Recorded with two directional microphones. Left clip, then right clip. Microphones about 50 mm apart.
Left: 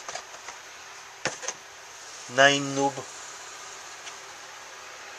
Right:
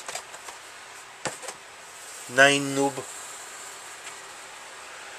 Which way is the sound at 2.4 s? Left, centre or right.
Right.